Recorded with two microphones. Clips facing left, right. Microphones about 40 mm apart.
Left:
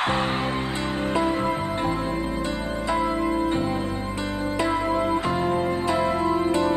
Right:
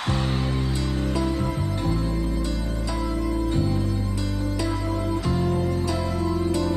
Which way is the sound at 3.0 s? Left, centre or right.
Left.